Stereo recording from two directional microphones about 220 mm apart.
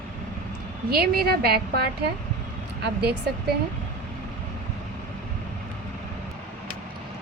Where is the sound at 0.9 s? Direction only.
45° right (ahead or behind).